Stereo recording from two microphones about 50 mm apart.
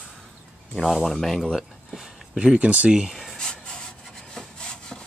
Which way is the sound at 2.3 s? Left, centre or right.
Centre.